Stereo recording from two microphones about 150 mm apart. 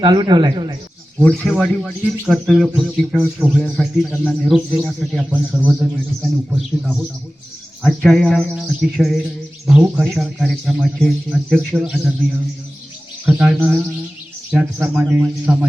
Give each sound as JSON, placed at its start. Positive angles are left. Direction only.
{"t": 0.0, "sound": "speech", "side_deg": -30}
{"t": 1.2, "sound": "speech", "side_deg": 5}
{"t": 5.3, "sound": "a man's voice", "side_deg": -10}
{"t": 13.2, "sound": "a man's voice", "side_deg": -5}